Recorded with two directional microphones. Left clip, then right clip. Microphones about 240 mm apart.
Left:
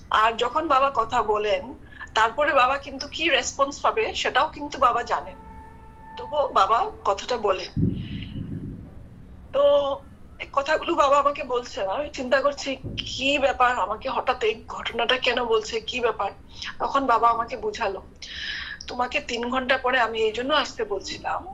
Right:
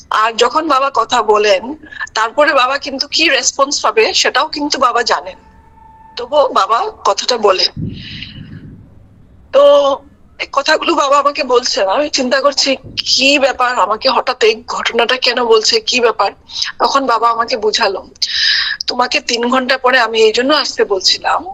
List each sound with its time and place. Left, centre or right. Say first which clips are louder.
0.1 s speech: right 9 dB; right
9.5 s speech: right 12 dB; right